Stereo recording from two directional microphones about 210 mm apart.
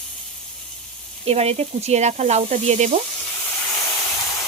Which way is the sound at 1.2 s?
30° right (ahead or behind).